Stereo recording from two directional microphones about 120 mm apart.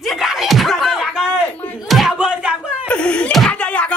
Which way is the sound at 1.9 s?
Centre (ahead or behind).